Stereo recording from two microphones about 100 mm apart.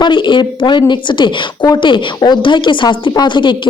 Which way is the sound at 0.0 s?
50° left (ahead or behind).